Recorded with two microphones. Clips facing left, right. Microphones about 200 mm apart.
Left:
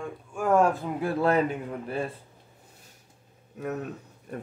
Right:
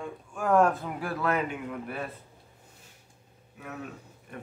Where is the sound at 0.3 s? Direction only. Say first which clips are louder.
Left 1 dB; 5° left (ahead or behind).